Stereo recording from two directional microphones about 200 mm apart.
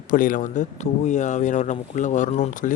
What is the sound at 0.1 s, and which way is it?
A man's voice, 40° left (ahead or behind).